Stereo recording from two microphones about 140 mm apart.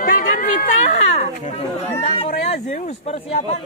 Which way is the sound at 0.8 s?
55° left (ahead or behind).